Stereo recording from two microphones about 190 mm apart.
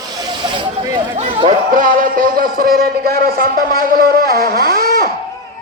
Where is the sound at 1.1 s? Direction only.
40° right (ahead or behind).